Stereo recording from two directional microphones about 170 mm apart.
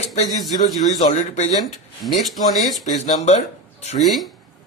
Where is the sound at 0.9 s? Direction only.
40° left (ahead or behind).